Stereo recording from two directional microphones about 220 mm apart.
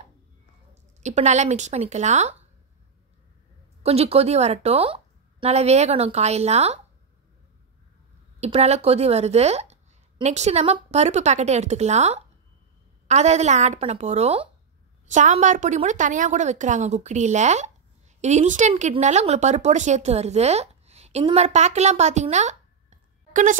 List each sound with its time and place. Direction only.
1.0 s a woman's voice: 30° right (ahead or behind)
3.8 s speech: 30° right (ahead or behind)
8.4 s a woman's voice: 30° right (ahead or behind)